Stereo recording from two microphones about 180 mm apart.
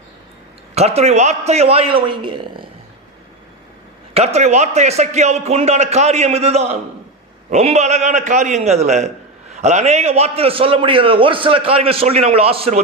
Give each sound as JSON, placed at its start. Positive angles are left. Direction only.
{"t": 0.7, "sound": "a man's voice", "side_deg": -35}
{"t": 4.1, "sound": "a man's voice", "side_deg": -35}